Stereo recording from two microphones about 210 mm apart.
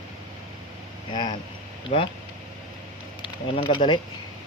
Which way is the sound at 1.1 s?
20° left (ahead or behind).